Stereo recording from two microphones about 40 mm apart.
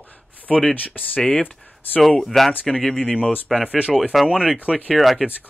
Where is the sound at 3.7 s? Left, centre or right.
Right.